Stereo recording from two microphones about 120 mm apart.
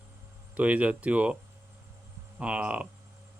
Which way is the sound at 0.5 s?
10° right (ahead or behind).